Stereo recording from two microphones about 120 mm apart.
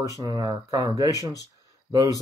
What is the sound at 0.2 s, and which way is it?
Speech, 30° right (ahead or behind).